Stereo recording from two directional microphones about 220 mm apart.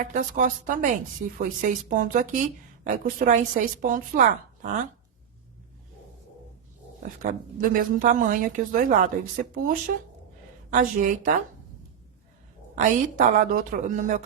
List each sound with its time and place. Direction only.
0.0 s a woman's voice: 35° right (ahead or behind)
7.7 s a woman's voice: 40° right (ahead or behind)
12.7 s a woman's voice: 35° right (ahead or behind)